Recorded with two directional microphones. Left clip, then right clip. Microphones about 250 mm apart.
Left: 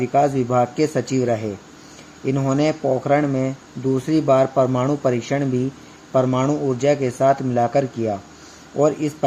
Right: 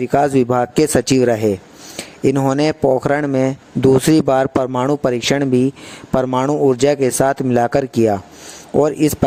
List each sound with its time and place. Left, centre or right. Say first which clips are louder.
0.0 s speech: right 3 dB; right